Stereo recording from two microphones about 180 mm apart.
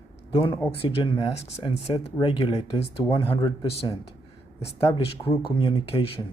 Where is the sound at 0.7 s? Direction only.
30° left (ahead or behind).